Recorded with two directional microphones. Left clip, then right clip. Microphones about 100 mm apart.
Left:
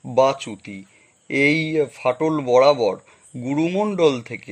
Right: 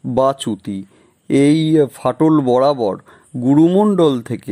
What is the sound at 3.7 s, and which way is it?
Speech, 35° right (ahead or behind).